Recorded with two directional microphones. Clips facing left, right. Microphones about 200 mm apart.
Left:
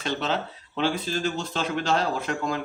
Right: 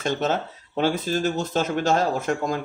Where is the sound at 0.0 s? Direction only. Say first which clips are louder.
Right 4 dB; 45° right (ahead or behind).